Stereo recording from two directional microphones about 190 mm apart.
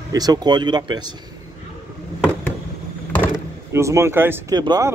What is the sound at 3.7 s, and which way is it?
Speech, 15° right (ahead or behind).